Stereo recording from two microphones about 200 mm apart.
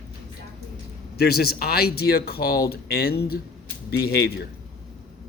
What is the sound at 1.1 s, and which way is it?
Speech, 50° left (ahead or behind).